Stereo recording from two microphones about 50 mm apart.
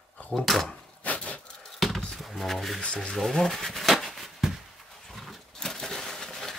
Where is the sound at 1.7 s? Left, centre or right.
Centre.